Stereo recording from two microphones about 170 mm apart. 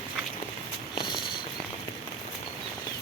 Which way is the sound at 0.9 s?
25° left (ahead or behind).